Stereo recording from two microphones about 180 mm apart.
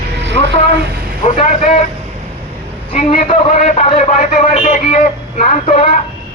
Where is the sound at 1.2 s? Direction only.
45° left (ahead or behind).